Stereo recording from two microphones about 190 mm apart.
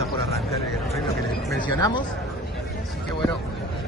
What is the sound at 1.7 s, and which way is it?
Speech, 20° left (ahead or behind).